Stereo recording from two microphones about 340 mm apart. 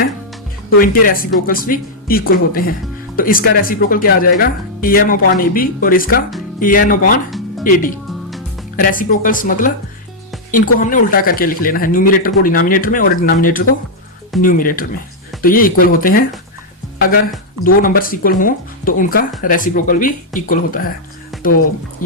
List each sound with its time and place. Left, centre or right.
0.8 s speech: left
17.8 s speech: left